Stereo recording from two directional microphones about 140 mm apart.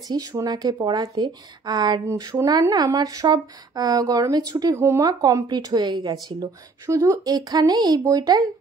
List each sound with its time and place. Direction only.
0.1 s speech: 25° right (ahead or behind)